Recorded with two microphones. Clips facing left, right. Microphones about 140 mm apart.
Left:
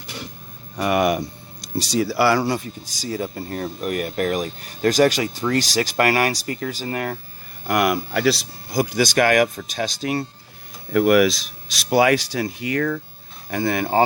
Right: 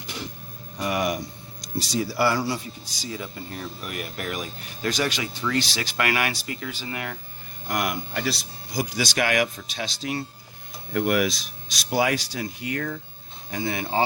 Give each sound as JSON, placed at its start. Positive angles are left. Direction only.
{"t": 0.8, "sound": "speech", "side_deg": 60}
{"t": 1.6, "sound": "speech", "side_deg": 75}
{"t": 2.5, "sound": "speech", "side_deg": 45}
{"t": 7.7, "sound": "speech", "side_deg": 80}
{"t": 8.7, "sound": "speech", "side_deg": 55}
{"t": 10.9, "sound": "speech", "side_deg": 90}
{"t": 13.5, "sound": "speech", "side_deg": 55}